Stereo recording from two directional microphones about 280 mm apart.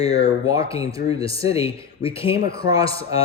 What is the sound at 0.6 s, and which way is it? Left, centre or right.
Speech, centre.